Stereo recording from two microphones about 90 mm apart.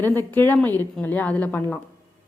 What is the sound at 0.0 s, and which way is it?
A woman's voice, 25° left (ahead or behind).